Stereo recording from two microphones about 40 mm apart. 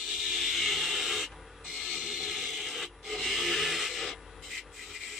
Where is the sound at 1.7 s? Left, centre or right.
Centre.